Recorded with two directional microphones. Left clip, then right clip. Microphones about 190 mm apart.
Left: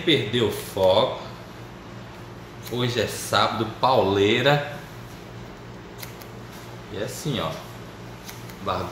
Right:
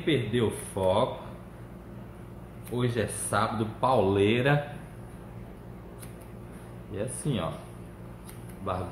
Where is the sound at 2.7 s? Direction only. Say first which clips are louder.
Left 5 dB; 20° right (ahead or behind).